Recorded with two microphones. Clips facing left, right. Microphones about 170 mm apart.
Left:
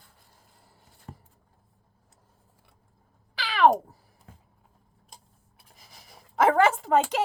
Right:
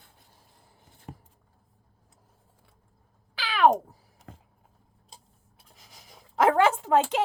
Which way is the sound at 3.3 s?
Centre (ahead or behind).